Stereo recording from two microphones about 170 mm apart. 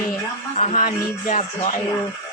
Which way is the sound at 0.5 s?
40° left (ahead or behind).